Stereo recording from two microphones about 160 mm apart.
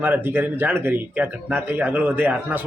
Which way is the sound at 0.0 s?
15° right (ahead or behind).